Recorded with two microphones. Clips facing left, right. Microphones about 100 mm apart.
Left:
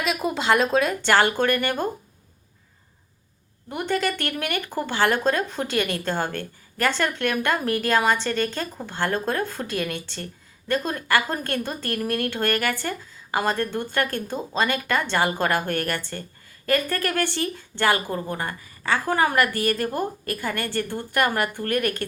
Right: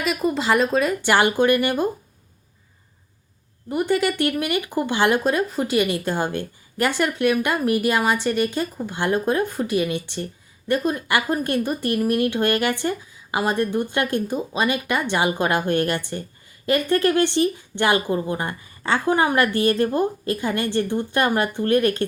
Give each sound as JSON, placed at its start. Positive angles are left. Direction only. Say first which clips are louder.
{"t": 0.0, "sound": "speech", "louder": "right 2 dB", "side_deg": 0}
{"t": 1.1, "sound": "speech", "louder": "right 2 dB", "side_deg": -15}
{"t": 3.7, "sound": "speech", "louder": "right 4 dB", "side_deg": -5}